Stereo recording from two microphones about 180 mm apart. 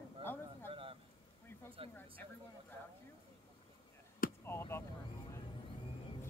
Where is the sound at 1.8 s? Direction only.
30° right (ahead or behind).